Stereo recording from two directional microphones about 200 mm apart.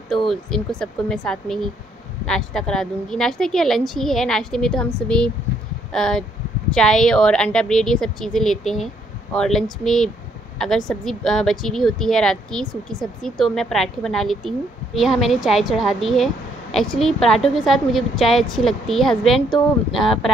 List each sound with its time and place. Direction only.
0.1 s speech: centre (ahead or behind)